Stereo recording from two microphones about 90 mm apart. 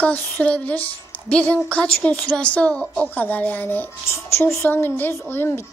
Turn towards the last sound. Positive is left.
turn(degrees=25)  # may be behind; listen again after turning